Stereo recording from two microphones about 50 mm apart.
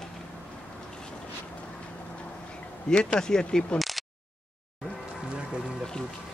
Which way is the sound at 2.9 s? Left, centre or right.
Centre.